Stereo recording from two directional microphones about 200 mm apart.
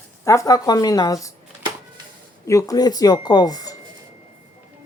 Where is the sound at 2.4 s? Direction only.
15° left (ahead or behind).